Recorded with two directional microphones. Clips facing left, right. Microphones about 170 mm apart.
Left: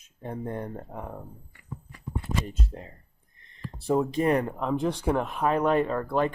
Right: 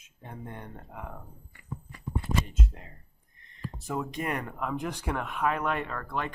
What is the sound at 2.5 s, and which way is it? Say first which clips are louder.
Speech: left 2 dB; 35° left (ahead or behind).